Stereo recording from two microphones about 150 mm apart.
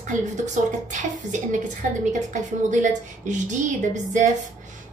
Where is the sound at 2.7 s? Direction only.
55° right (ahead or behind).